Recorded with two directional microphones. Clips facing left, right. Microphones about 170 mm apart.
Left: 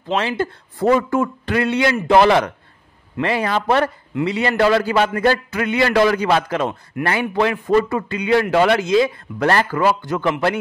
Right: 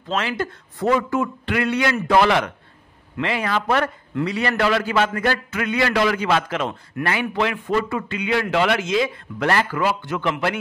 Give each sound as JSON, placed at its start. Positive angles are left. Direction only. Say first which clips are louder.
{"t": 0.1, "sound": "a man's voice", "louder": "left 4 dB", "side_deg": 30}
{"t": 1.5, "sound": "a man's voice", "louder": "left 3 dB", "side_deg": 25}
{"t": 4.6, "sound": "a man's voice", "louder": "left 4 dB", "side_deg": 35}